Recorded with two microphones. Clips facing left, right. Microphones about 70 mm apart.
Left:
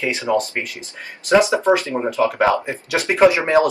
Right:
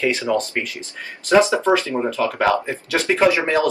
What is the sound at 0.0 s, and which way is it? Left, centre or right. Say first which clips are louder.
Speech: even; centre.